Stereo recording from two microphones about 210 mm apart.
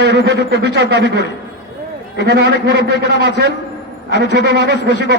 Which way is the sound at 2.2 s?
50° right (ahead or behind).